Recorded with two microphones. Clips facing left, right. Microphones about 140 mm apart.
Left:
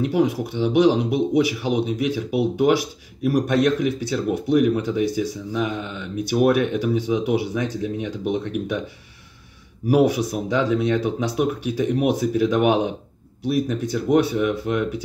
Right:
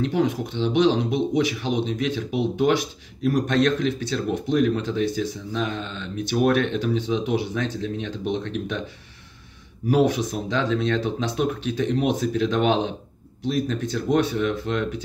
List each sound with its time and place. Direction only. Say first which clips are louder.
0.0 s speech: left 2 dB; 10° left (ahead or behind)
9.8 s speech: left 2 dB; 10° left (ahead or behind)